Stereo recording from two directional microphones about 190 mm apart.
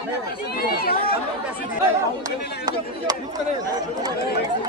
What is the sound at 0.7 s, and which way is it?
Chatter, 55° left (ahead or behind).